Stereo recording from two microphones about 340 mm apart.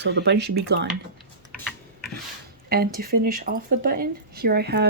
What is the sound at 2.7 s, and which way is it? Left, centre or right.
Speech, right.